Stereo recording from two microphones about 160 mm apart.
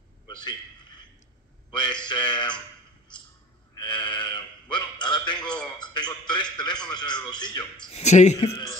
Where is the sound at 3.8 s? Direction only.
30° left (ahead or behind).